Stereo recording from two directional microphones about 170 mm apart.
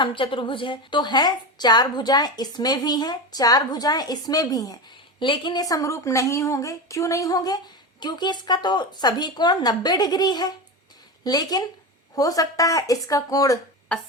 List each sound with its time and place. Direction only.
0.0 s a woman's voice: 30° left (ahead or behind)